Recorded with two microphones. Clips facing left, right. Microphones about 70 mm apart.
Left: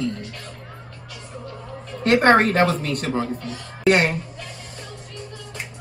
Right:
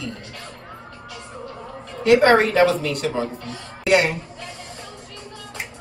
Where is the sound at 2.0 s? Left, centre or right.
Left.